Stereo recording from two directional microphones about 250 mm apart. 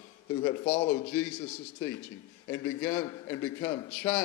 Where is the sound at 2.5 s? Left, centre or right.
Centre.